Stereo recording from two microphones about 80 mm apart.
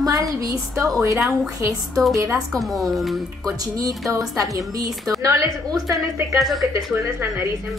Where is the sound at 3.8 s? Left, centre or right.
Right.